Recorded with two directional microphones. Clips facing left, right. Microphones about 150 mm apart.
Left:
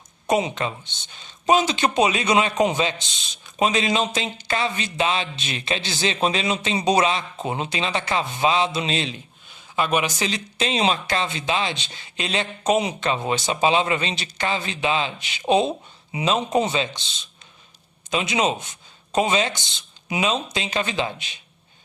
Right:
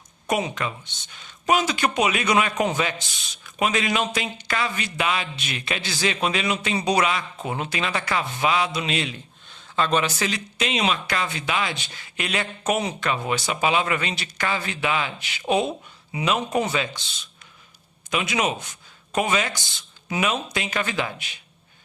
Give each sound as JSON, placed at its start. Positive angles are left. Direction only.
{"t": 0.3, "sound": "speech", "side_deg": 25}
{"t": 9.7, "sound": "speech", "side_deg": 15}